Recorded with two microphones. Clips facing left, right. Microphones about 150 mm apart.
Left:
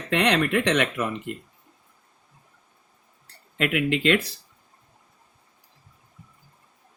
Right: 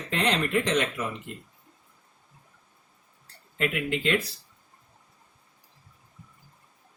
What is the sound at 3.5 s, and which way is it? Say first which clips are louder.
Speech: left 4 dB; 75° left (ahead or behind).